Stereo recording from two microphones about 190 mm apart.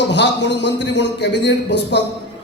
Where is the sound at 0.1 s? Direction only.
65° left (ahead or behind).